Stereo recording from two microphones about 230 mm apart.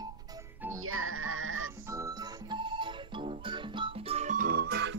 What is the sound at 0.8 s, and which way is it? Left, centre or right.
Music, right.